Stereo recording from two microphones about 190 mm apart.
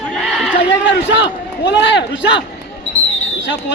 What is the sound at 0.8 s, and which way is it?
A man's voice, 70° left (ahead or behind).